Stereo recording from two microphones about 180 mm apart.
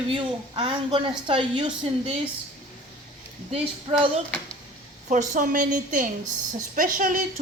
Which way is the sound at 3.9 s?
30° right (ahead or behind).